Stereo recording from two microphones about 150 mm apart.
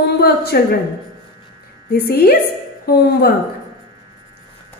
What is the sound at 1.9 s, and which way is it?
A woman's voice, 90° left.